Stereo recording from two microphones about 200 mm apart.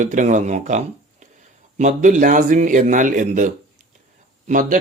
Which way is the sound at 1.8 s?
40° right (ahead or behind).